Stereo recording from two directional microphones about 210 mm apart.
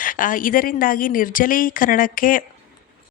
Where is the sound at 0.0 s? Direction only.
40° left (ahead or behind).